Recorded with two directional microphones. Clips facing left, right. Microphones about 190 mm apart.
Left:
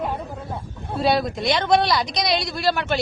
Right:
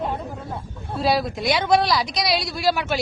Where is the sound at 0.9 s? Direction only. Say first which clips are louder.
Left 1 dB; centre (ahead or behind).